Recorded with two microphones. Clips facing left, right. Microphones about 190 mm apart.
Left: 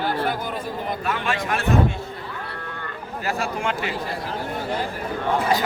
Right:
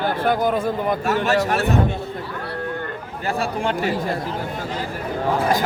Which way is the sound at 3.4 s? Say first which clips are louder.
Right 5 dB; 35° right (ahead or behind).